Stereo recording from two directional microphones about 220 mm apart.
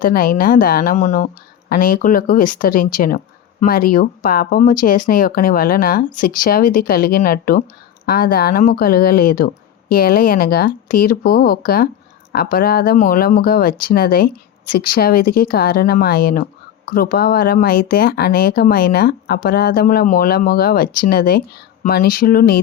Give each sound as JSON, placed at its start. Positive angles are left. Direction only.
{"t": 0.0, "sound": "speech", "side_deg": 40}